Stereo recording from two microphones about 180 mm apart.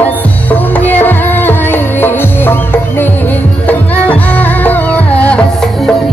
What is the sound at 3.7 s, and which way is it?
Music, 10° left (ahead or behind).